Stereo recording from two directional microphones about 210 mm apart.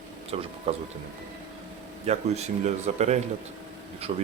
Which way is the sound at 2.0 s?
30° right (ahead or behind).